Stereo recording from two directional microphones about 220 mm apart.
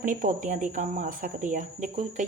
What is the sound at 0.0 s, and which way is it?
Speech, 35° right (ahead or behind).